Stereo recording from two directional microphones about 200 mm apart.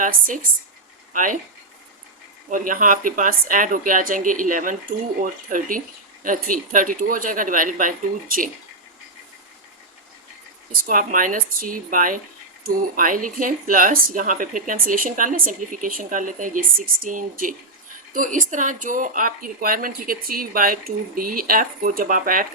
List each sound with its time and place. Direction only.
1.1 s speech: 40° right (ahead or behind)
2.5 s speech: 40° right (ahead or behind)
10.7 s speech: 45° right (ahead or behind)